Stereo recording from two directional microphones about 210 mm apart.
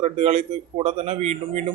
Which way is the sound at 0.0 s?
30° right (ahead or behind).